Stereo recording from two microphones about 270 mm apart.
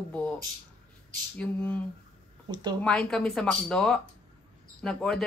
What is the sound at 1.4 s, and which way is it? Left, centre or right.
Speech, centre.